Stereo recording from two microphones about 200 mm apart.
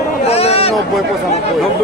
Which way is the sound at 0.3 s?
30° left (ahead or behind).